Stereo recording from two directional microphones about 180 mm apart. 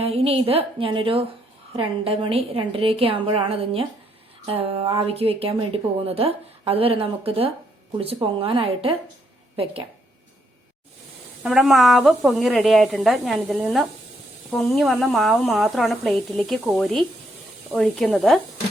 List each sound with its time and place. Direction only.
0.0 s a woman's voice: 35° right (ahead or behind)
11.4 s speech: centre (ahead or behind)